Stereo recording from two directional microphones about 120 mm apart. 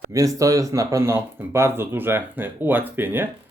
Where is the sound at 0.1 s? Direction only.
25° right (ahead or behind).